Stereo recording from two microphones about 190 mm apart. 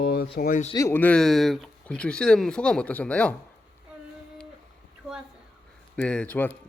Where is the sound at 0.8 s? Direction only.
15° left (ahead or behind).